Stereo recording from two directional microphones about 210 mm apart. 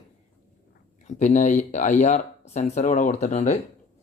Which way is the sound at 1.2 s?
35° left (ahead or behind).